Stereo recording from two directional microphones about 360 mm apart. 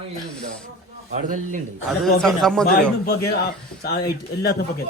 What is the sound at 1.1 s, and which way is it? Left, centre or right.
Speech, right.